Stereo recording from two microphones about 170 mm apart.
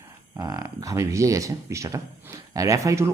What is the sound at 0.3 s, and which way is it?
Speech, 20° right (ahead or behind).